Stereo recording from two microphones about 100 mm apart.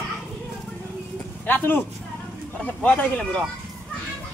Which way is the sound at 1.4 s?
20° left (ahead or behind).